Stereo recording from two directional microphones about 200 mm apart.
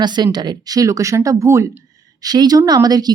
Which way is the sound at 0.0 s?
20° right (ahead or behind).